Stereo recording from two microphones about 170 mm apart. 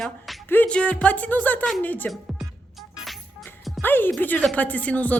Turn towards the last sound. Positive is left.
turn(degrees=10)  # may be behind; listen again after turning